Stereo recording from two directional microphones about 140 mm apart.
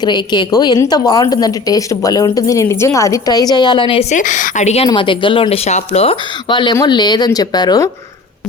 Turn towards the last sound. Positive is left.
turn(degrees=30)  # may be behind; listen again after turning